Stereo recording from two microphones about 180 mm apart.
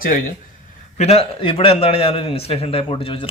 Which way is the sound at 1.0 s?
35° left (ahead or behind).